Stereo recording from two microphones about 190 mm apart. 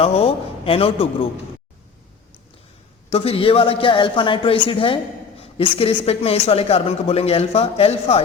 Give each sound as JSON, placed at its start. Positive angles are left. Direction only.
{"t": 0.0, "sound": "a man's voice", "side_deg": 30}
{"t": 3.1, "sound": "a man's voice", "side_deg": 30}